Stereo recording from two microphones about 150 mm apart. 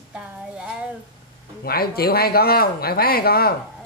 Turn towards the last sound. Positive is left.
turn(degrees=90)